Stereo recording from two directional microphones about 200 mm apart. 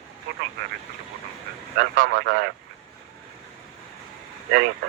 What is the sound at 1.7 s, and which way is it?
Speech, 45° right (ahead or behind).